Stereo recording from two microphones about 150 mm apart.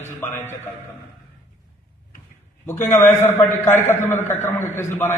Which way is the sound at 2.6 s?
15° left (ahead or behind).